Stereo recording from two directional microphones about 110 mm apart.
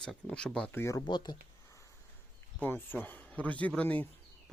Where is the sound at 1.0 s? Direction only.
40° left (ahead or behind).